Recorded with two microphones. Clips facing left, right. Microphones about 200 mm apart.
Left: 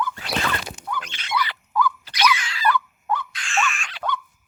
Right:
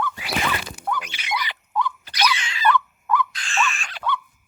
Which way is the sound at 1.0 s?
10° right (ahead or behind).